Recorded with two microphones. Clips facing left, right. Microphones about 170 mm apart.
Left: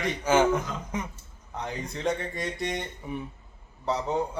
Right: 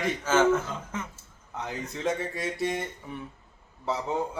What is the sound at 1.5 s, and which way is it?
A man's voice, centre (ahead or behind).